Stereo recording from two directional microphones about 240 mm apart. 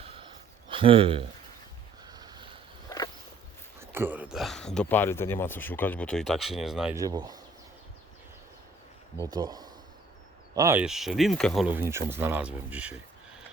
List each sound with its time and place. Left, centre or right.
0.7 s speech: right
2.0 s a sound: centre
3.8 s speech: centre
6.9 s speech: centre
9.1 s speech: centre